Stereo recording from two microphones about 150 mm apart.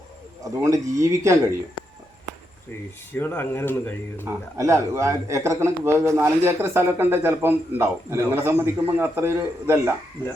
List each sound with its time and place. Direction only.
0.4 s speech: 20° right (ahead or behind)
3.1 s speech: 15° left (ahead or behind)
4.3 s a man's voice: 20° right (ahead or behind)